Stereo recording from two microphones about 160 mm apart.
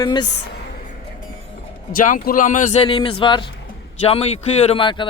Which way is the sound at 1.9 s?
60° left (ahead or behind).